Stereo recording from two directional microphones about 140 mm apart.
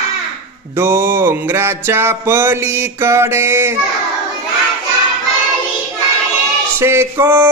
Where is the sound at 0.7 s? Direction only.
15° right (ahead or behind).